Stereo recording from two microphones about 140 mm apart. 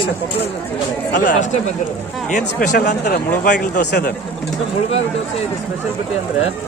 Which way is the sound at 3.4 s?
70° left (ahead or behind).